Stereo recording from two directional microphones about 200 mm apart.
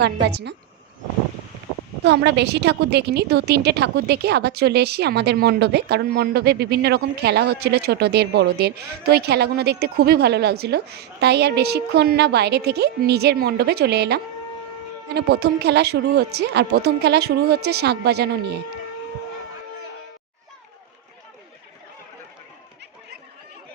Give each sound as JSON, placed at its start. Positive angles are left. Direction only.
{"t": 0.0, "sound": "a woman's voice", "side_deg": -55}
{"t": 2.0, "sound": "a woman's voice", "side_deg": -60}